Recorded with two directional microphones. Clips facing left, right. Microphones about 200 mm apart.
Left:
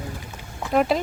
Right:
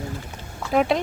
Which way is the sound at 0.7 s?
Centre (ahead or behind).